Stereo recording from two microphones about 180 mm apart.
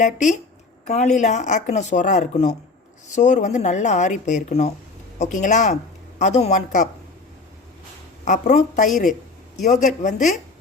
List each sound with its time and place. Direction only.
0.0 s speech: 45° left (ahead or behind)
8.2 s speech: 40° left (ahead or behind)